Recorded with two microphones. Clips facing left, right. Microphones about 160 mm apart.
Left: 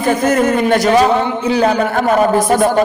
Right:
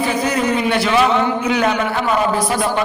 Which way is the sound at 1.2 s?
25° left (ahead or behind).